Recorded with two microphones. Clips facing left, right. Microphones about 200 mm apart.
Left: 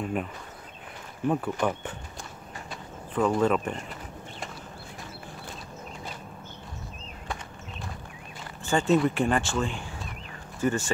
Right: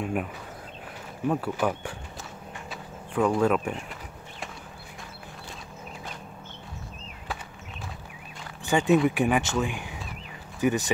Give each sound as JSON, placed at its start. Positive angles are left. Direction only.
{"t": 0.0, "sound": "speech", "side_deg": 0}
{"t": 1.3, "sound": "speech", "side_deg": -5}
{"t": 2.7, "sound": "a sound", "side_deg": 0}
{"t": 8.6, "sound": "speech", "side_deg": -15}